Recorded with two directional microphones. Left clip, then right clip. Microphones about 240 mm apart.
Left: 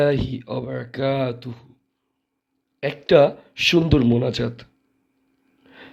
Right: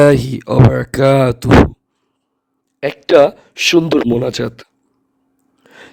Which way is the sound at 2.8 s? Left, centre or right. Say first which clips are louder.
Right 6 dB; right.